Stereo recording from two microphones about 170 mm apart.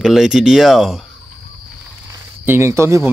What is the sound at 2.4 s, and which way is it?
Speech, 15° right (ahead or behind).